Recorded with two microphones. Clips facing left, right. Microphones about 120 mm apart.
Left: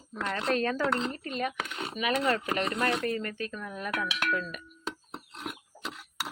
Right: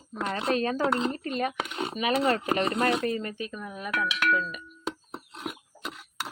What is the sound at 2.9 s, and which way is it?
A woman's voice, 20° right (ahead or behind).